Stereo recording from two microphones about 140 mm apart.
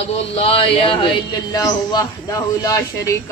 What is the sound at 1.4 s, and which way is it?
A man's voice, 25° left (ahead or behind).